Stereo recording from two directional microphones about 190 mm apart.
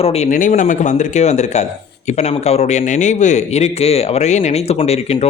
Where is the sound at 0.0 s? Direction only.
35° left (ahead or behind).